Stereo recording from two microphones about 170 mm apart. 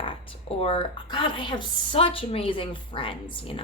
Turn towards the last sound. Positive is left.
turn(degrees=30)  # may be behind; listen again after turning